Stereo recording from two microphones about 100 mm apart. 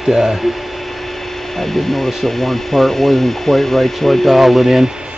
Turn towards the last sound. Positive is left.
turn(degrees=0)  # may be behind; listen again after turning